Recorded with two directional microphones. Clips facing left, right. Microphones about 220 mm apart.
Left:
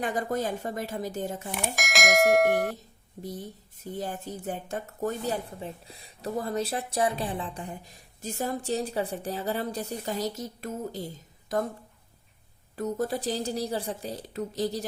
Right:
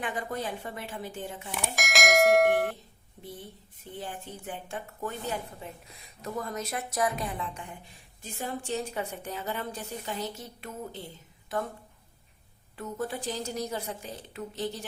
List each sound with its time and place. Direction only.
0.0 s speech: 40° left (ahead or behind)
1.7 s speech: centre (ahead or behind)
3.2 s speech: 40° left (ahead or behind)
12.7 s speech: 40° left (ahead or behind)